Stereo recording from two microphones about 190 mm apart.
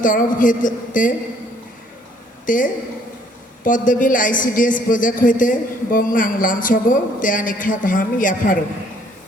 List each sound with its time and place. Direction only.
0.0 s a man's voice: 45° left (ahead or behind)
2.5 s a man's voice: 45° left (ahead or behind)